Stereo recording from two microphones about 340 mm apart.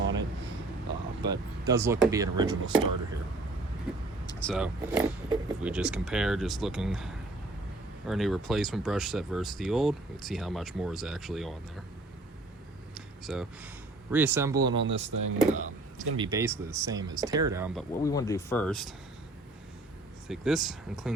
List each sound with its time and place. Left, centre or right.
0.0 s a sound: right
1.2 s speech: centre
4.3 s speech: centre
12.9 s a sound: centre
14.1 s speech: centre
14.8 s speech: right
15.4 s speech: centre
16.2 s speech: centre
18.0 s speech: centre
20.2 s speech: centre